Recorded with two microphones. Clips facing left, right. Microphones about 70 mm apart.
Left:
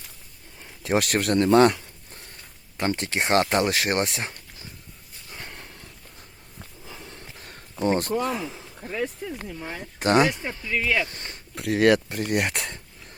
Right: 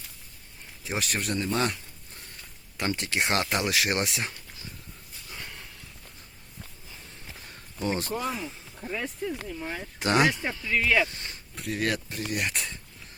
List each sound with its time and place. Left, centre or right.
0.8 s speech: left
2.7 s speech: left
5.3 s a sound: left
6.8 s a sound: left
7.9 s speech: left
8.2 s speech: left
9.0 s speech: centre
10.0 s speech: left
10.8 s speech: centre
11.1 s speech: left